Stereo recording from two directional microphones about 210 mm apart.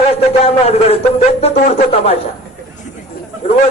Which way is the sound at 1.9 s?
30° left (ahead or behind).